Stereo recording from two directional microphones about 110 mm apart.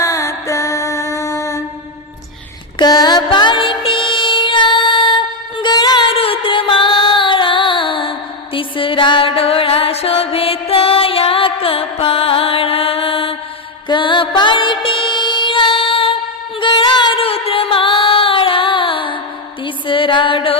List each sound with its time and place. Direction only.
0.0 s music: 30° left (ahead or behind)
2.7 s music: 40° left (ahead or behind)
6.1 s music: 60° left (ahead or behind); by 17.2 s 40° left (ahead or behind)
17.2 s music: 60° left (ahead or behind)